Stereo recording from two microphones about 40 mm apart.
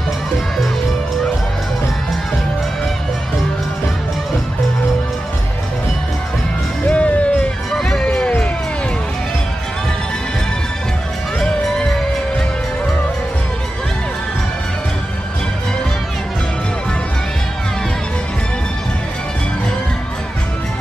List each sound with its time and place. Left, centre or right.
6.9 s music: left
7.7 s music: centre
11.3 s music: centre